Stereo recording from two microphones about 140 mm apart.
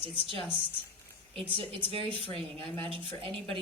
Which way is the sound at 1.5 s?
40° right (ahead or behind).